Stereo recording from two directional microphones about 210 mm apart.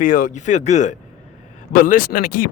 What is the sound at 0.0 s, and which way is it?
Speech, 40° left (ahead or behind).